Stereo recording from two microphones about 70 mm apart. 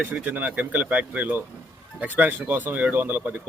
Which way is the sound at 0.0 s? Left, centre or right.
Right.